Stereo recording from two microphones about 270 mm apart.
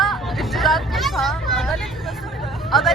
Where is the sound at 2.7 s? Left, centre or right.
Centre.